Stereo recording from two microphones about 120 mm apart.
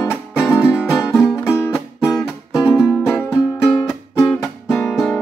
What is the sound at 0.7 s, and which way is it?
Music, 5° right (ahead or behind).